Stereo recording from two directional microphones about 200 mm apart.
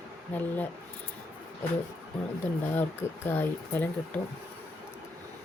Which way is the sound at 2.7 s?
10° left (ahead or behind).